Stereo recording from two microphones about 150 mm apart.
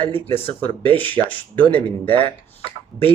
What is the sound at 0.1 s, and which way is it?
Speech, 40° left (ahead or behind).